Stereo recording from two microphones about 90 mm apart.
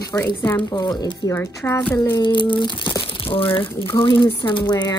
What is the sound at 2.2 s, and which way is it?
Speech, 60° left (ahead or behind).